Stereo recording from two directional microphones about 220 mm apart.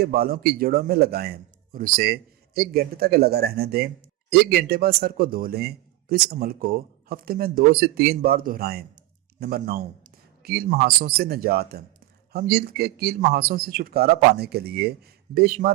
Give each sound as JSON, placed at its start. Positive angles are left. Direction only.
{"t": 0.0, "sound": "a man's voice", "side_deg": -45}